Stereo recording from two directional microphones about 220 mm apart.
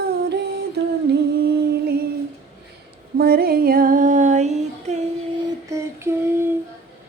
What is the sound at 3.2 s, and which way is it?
Music, 45° right (ahead or behind).